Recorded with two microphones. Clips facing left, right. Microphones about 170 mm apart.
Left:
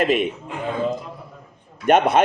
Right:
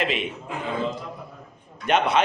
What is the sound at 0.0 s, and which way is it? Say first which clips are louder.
Speech: left 7 dB; 50° left (ahead or behind).